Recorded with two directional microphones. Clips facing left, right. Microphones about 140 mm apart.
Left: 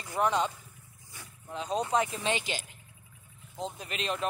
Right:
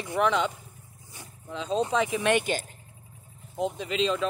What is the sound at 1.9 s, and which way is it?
Speech, 90° right.